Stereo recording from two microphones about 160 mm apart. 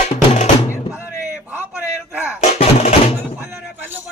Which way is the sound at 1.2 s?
10° right (ahead or behind).